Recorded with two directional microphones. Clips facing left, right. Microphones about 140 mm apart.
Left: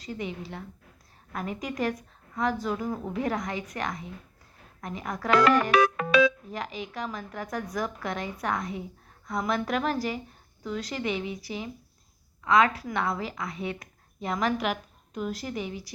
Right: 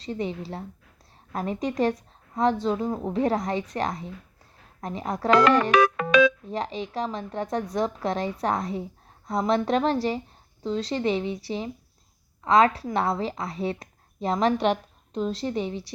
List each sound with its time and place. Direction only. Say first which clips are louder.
0.0 s speech: right 5 dB; 30° right (ahead or behind)
5.7 s music: right 2 dB; 90° right
6.5 s speech: right 5 dB; 30° right (ahead or behind)